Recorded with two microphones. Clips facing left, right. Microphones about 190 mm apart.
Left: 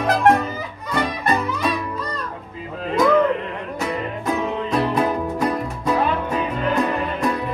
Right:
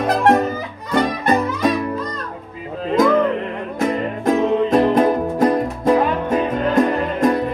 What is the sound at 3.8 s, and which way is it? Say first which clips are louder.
Music: right 7 dB; 45° right (ahead or behind).